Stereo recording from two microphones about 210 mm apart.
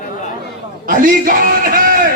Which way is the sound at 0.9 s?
40° right (ahead or behind).